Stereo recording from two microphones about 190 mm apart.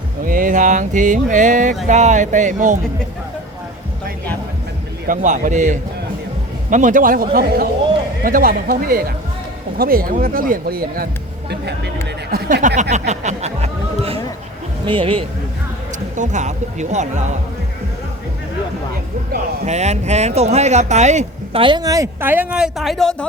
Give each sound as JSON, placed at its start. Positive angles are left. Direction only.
{"t": 0.3, "sound": "speech", "side_deg": -45}
{"t": 5.0, "sound": "speech", "side_deg": -40}
{"t": 12.3, "sound": "music", "side_deg": -50}
{"t": 14.8, "sound": "speech", "side_deg": -30}
{"t": 16.1, "sound": "speech", "side_deg": -40}
{"t": 19.6, "sound": "speech", "side_deg": -35}